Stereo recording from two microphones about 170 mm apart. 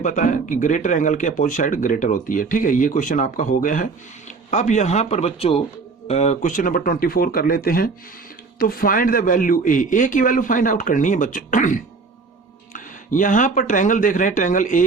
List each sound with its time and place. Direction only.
0.0 s speech: 45° left (ahead or behind)